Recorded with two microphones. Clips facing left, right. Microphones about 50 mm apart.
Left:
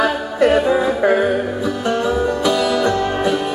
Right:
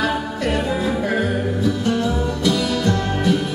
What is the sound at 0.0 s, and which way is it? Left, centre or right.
Music, centre.